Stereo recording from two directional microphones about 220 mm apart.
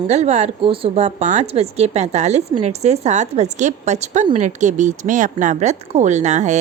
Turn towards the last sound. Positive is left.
turn(degrees=-30)  # may be behind; listen again after turning